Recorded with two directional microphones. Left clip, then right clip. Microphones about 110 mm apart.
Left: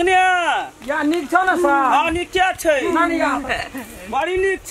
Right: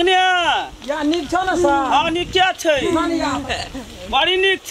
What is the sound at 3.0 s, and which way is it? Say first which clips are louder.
Speech: left 2 dB; 30° left (ahead or behind).